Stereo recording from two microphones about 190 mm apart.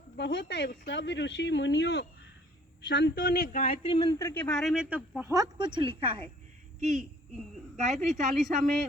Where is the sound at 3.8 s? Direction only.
25° left (ahead or behind); by 6.2 s 25° right (ahead or behind).